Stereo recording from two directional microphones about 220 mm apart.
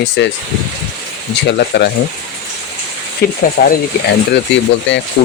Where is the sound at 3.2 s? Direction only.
45° left (ahead or behind).